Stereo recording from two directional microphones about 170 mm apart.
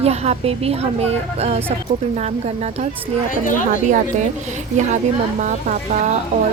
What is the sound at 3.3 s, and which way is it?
Speech, 55° left (ahead or behind).